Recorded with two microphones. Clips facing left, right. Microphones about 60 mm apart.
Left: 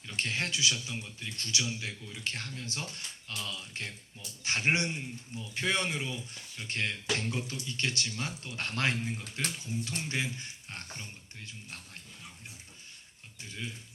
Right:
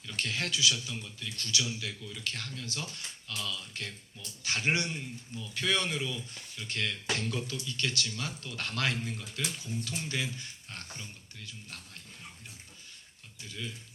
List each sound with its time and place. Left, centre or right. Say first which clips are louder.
0.0 s speech: left 1 dB; left
13.4 s speech: even; left